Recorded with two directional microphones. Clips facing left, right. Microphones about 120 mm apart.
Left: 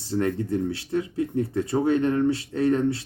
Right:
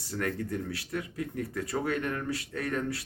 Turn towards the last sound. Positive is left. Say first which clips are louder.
# left 10 dB
turn(degrees=25)  # may be behind; listen again after turning